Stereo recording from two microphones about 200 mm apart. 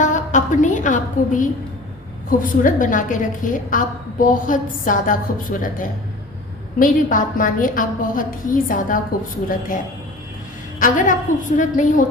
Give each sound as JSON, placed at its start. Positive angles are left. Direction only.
{"t": 0.0, "sound": "a woman's voice", "side_deg": 40}
{"t": 10.8, "sound": "a woman's voice", "side_deg": 40}